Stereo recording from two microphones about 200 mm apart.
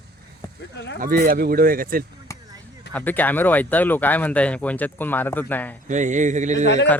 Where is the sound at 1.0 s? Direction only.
45° right (ahead or behind).